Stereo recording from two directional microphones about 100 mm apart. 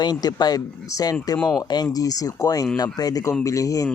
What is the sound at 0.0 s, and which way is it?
A man's voice, 45° left (ahead or behind).